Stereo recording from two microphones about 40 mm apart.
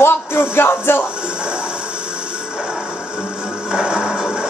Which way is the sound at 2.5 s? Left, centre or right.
Right.